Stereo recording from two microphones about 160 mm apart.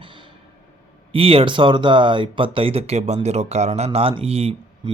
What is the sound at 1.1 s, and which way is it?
Speech, 35° right (ahead or behind).